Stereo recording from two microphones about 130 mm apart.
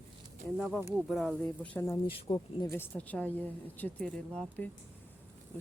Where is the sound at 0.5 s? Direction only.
Centre (ahead or behind).